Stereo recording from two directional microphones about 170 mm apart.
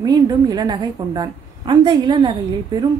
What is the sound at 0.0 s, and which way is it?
A woman's voice, 25° right (ahead or behind).